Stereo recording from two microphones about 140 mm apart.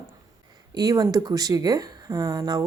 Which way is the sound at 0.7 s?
25° right (ahead or behind).